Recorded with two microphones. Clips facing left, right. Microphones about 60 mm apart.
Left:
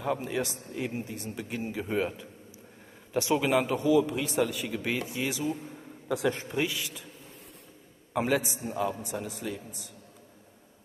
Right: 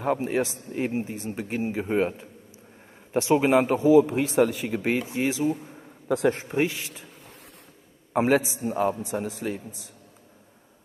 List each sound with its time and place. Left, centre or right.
0.0 s a man's voice: right
8.1 s a man's voice: right